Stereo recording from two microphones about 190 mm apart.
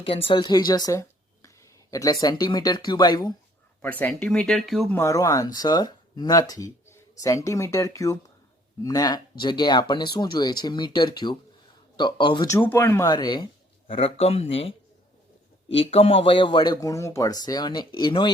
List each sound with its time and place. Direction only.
0.0 s speech: 30° left (ahead or behind)
4.0 s speech: 5° left (ahead or behind)
4.9 s speech: 15° left (ahead or behind)
12.5 s speech: 10° left (ahead or behind); by 14.7 s 30° left (ahead or behind)
15.7 s speech: 30° left (ahead or behind)